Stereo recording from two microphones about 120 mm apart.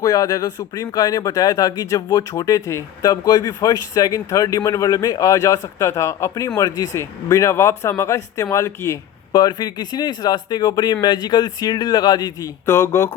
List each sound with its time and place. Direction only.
0.0 s speech: 30° left (ahead or behind)
9.3 s speech: 35° left (ahead or behind)
12.6 s speech: 25° left (ahead or behind)